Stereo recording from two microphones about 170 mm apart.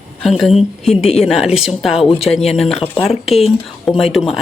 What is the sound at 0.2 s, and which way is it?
Speech, centre (ahead or behind).